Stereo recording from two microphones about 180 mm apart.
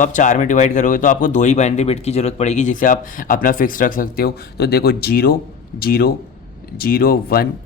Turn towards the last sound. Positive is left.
turn(degrees=55)  # may be behind; listen again after turning